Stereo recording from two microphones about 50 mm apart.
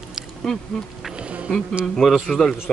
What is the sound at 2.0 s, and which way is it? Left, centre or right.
Speech, centre.